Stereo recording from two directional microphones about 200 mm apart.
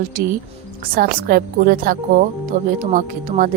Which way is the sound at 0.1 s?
45° right (ahead or behind).